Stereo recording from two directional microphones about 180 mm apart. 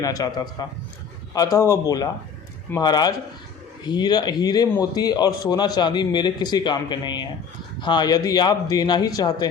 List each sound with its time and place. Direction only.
0.0 s a man's voice: 20° left (ahead or behind)